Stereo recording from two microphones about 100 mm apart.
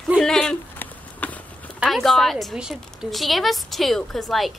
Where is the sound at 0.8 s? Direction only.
15° left (ahead or behind).